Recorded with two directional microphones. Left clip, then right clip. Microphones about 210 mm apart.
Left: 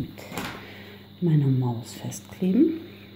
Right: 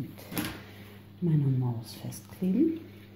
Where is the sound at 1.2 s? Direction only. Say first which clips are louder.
Left 6 dB; 15° left (ahead or behind).